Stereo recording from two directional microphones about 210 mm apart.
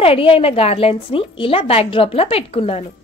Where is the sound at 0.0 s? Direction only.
25° left (ahead or behind).